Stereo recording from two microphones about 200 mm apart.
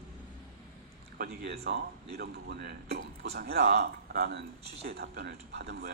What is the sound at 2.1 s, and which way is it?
A man's voice, 50° right (ahead or behind).